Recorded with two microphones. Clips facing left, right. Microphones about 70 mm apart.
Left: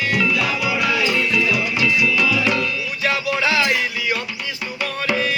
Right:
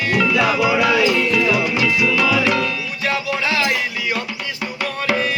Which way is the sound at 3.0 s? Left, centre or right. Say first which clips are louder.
Left 1 dB; right.